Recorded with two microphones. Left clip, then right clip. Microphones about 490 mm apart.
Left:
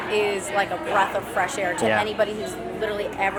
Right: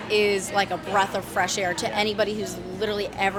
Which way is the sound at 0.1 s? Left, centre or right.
Right.